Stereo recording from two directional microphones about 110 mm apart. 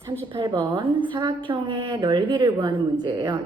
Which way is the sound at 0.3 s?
50° right (ahead or behind).